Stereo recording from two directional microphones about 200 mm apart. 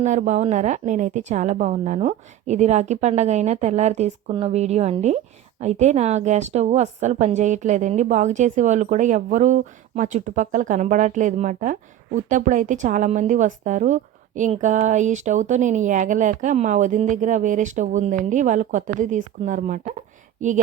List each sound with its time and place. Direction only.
0.0 s a woman's voice: 35° right (ahead or behind)